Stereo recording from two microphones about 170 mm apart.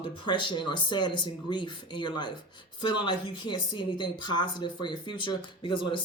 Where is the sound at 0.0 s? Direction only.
30° left (ahead or behind).